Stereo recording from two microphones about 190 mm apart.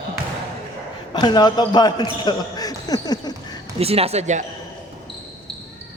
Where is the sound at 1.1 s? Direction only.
20° left (ahead or behind).